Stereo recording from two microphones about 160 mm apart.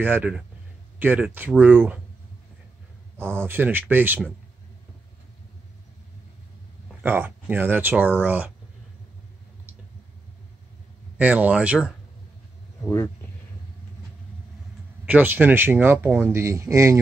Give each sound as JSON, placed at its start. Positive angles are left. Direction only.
{"t": 0.0, "sound": "speech", "side_deg": -10}
{"t": 3.2, "sound": "speech", "side_deg": -15}
{"t": 7.0, "sound": "speech", "side_deg": -10}
{"t": 11.1, "sound": "speech", "side_deg": -10}
{"t": 12.8, "sound": "speech", "side_deg": 15}
{"t": 15.0, "sound": "speech", "side_deg": -10}